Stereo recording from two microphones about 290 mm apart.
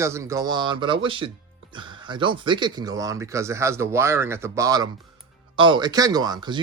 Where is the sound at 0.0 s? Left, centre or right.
Centre.